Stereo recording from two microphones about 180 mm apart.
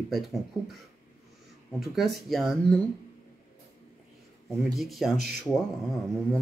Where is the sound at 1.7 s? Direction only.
Centre (ahead or behind).